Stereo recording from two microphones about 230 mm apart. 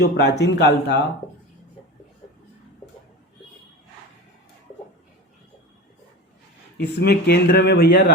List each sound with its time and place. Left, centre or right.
0.0 s speech: left
6.7 s speech: left